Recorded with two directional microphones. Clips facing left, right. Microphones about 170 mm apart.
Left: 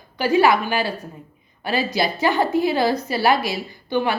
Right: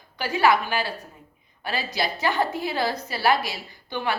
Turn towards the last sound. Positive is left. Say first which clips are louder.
# left 6 dB
turn(degrees=15)  # may be behind; listen again after turning